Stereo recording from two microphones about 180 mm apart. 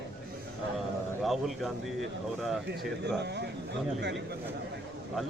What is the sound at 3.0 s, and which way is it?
Speech, 70° right (ahead or behind).